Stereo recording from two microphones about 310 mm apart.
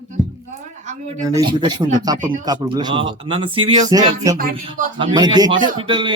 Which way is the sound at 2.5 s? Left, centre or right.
Centre.